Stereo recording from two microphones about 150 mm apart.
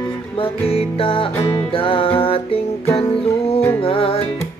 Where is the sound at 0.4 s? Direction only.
40° left (ahead or behind).